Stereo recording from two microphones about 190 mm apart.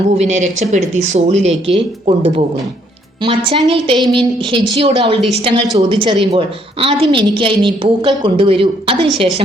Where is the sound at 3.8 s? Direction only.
25° right (ahead or behind).